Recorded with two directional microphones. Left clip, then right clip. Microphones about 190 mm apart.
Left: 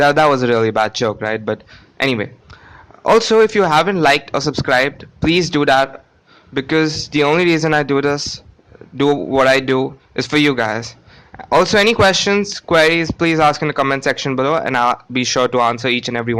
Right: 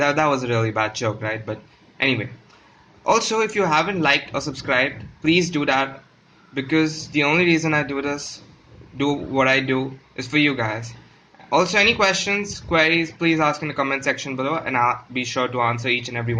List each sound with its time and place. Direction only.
0.0 s speech: 45° left (ahead or behind)